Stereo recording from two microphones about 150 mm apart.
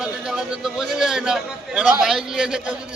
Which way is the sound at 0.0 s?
5° right (ahead or behind).